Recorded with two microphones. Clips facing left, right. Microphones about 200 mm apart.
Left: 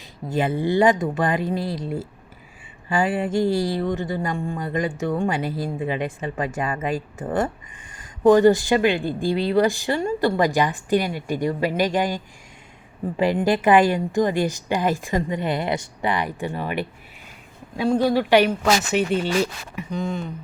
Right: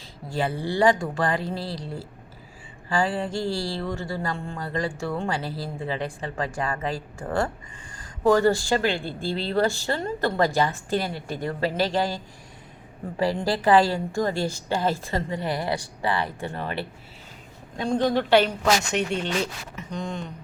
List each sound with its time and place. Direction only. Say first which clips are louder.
0.3 s speech: left 5 dB; 20° left (ahead or behind)